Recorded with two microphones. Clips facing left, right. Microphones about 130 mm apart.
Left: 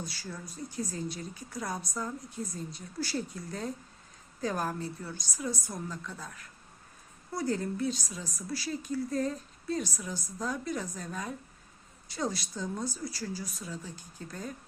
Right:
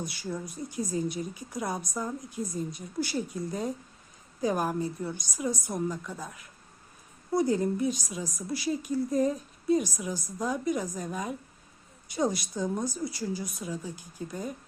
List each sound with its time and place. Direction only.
0.0 s speech: 15° right (ahead or behind)